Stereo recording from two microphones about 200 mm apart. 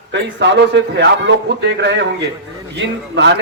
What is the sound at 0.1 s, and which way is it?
A man's voice, 60° right (ahead or behind).